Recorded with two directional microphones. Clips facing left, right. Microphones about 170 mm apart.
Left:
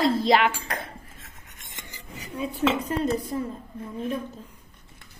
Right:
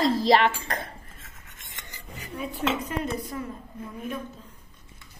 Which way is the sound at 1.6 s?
25° left (ahead or behind).